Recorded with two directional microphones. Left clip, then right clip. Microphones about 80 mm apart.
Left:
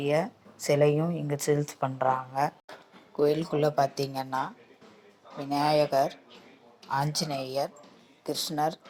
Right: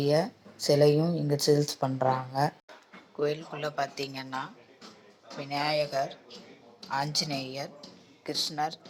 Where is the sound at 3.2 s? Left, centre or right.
Left.